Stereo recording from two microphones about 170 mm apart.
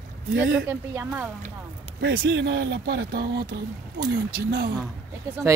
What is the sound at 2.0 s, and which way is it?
Speech, 85° right.